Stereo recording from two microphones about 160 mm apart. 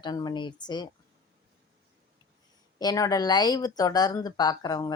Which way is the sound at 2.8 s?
25° left (ahead or behind).